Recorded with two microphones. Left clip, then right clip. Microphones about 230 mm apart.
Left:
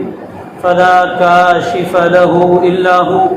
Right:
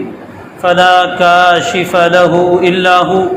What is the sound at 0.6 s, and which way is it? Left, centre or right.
Speech, right.